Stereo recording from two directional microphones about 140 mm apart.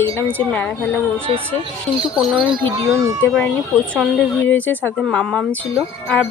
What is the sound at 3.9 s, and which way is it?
A woman's voice, 10° left (ahead or behind).